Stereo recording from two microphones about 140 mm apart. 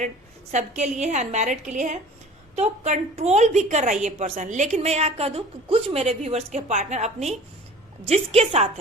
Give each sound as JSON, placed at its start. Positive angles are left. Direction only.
{"t": 0.5, "sound": "a woman's voice", "side_deg": -55}